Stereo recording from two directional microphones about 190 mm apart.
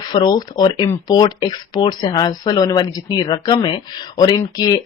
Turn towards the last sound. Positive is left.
turn(degrees=20)  # may be behind; listen again after turning